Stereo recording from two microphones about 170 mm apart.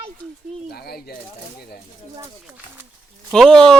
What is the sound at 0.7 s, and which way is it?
Speech, 65° left (ahead or behind).